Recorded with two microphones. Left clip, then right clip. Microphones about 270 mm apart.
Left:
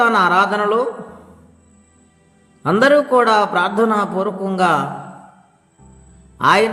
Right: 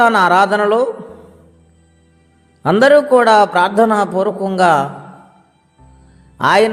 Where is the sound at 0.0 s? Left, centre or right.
Right.